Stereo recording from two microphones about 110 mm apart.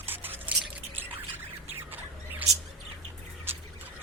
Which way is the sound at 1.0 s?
20° right (ahead or behind).